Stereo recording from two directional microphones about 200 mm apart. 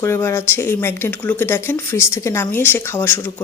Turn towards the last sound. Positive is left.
turn(degrees=10)  # may be behind; listen again after turning